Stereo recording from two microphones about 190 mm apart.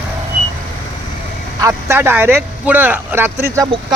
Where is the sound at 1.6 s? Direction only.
15° right (ahead or behind).